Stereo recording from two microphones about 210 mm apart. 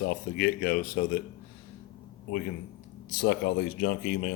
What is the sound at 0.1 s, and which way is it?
Speech, 45° left (ahead or behind).